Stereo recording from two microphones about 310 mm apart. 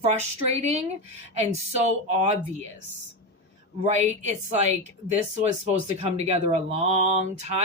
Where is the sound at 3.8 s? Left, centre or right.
Right.